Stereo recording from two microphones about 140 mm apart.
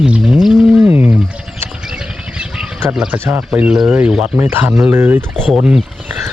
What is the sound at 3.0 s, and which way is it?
Speech, 15° right (ahead or behind).